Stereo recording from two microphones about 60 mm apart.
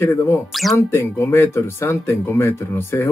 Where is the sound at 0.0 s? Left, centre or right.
Left.